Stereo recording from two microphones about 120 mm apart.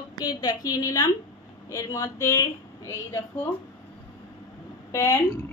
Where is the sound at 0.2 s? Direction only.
35° left (ahead or behind).